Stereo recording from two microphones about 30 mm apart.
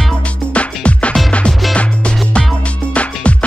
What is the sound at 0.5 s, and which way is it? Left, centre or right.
Music, left.